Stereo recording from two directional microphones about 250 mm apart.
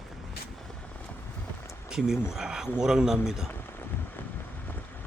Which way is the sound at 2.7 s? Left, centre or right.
Centre.